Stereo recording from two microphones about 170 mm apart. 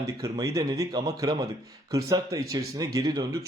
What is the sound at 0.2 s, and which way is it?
A man's voice, 20° right (ahead or behind).